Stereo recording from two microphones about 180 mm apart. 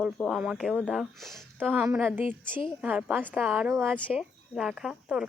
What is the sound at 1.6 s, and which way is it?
Speech, 10° right (ahead or behind).